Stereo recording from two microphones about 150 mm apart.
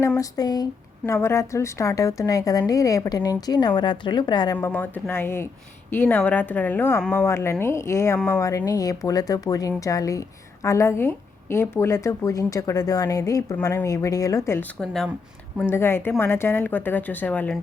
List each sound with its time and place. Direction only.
0.2 s speech: 25° left (ahead or behind)
4.5 s speech: 15° left (ahead or behind)
14.8 s speech: 5° left (ahead or behind)
15.7 s speech: 15° left (ahead or behind)